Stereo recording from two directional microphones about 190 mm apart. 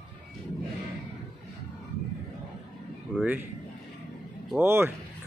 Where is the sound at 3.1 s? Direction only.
10° right (ahead or behind).